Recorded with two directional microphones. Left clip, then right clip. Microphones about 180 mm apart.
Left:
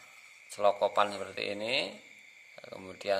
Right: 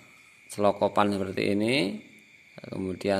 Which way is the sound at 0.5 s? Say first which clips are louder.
Right 3 dB; 25° right (ahead or behind).